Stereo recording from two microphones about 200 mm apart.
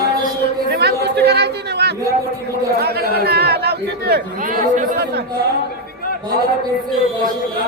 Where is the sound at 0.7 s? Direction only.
55° right (ahead or behind).